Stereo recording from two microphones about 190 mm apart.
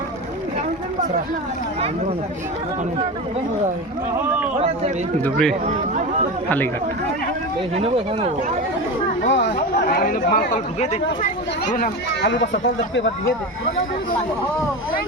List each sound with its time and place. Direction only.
4.2 s speech: 10° right (ahead or behind)
7.8 s speech: 30° right (ahead or behind)
9.3 s speech: 60° left (ahead or behind)
12.2 s speech: 70° left (ahead or behind)